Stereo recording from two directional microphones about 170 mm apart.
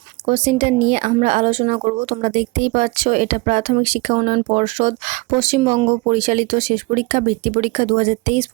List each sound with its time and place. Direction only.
0.3 s speech: 40° right (ahead or behind)
4.2 s speech: 30° right (ahead or behind)
4.4 s speech: 40° right (ahead or behind)